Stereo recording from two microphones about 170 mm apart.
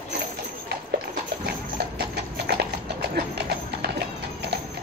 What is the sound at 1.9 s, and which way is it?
Clip-clop, 70° right (ahead or behind).